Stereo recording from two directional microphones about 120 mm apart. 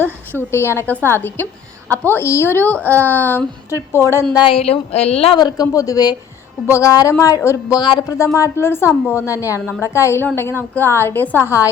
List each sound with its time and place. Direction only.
0.3 s a woman's voice: 20° left (ahead or behind)
4.4 s speech: 50° left (ahead or behind)
5.4 s a woman's voice: 35° left (ahead or behind)
7.8 s speech: 40° left (ahead or behind)
8.2 s a woman's voice: 25° left (ahead or behind)